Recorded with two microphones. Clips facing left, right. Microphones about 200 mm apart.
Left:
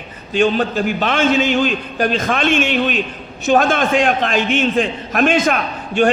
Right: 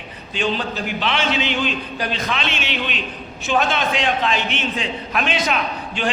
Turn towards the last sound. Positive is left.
turn(degrees=50)  # may be behind; listen again after turning